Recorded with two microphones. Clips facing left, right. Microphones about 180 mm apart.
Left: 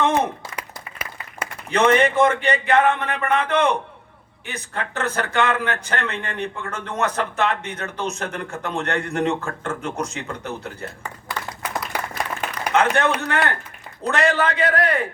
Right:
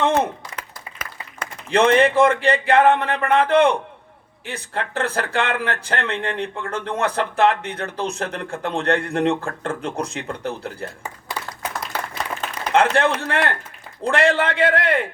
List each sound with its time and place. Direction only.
0.5 s applause: 10° left (ahead or behind)
1.7 s speech: 30° right (ahead or behind)
11.9 s a sound: 10° left (ahead or behind)
12.7 s a man's voice: 30° right (ahead or behind)